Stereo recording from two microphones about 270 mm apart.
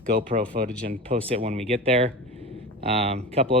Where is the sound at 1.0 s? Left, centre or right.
Right.